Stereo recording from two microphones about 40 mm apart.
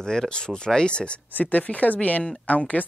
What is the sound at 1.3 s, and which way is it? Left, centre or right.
Speech, left.